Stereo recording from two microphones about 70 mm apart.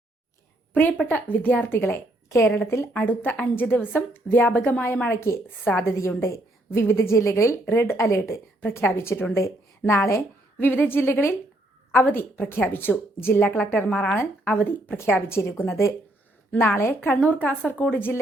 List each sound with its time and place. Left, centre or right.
0.7 s a woman's voice: left
2.9 s a woman's voice: left
5.0 s a woman's voice: left
8.8 s a woman's voice: left
9.3 s a woman's voice: left
14.9 s a woman's voice: left